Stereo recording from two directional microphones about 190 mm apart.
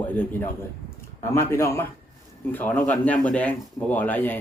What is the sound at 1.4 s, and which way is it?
Speech, 15° left (ahead or behind).